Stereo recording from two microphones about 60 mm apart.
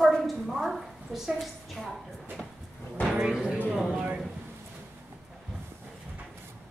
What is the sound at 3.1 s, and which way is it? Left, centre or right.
Music, centre.